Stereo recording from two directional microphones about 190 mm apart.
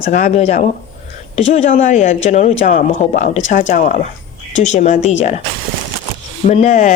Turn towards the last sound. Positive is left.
turn(degrees=40)  # may be behind; listen again after turning